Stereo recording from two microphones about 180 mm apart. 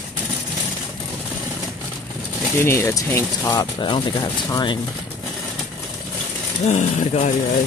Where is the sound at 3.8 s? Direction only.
25° left (ahead or behind).